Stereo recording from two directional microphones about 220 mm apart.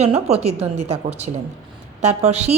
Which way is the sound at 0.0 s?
30° right (ahead or behind).